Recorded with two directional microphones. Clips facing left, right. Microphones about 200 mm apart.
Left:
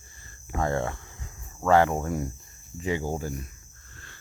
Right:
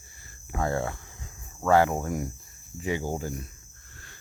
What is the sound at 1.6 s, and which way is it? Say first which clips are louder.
Cricket: left 1 dB; 10° right (ahead or behind).